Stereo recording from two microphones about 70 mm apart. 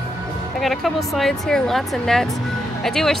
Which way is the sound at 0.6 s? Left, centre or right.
Centre.